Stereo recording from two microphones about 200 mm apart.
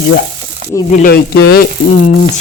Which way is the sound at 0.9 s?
45° left (ahead or behind).